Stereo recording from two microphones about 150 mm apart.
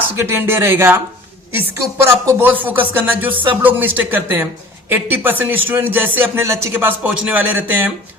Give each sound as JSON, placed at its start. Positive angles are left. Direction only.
{"t": 0.2, "sound": "a man's voice", "side_deg": -15}
{"t": 2.0, "sound": "a man's voice", "side_deg": -15}